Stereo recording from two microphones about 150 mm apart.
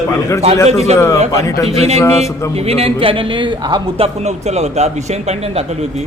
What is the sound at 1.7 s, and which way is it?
A man's voice, 45° right (ahead or behind).